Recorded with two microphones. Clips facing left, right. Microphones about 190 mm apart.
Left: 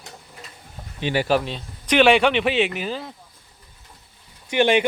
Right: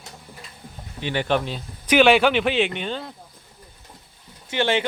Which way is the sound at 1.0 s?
10° left (ahead or behind).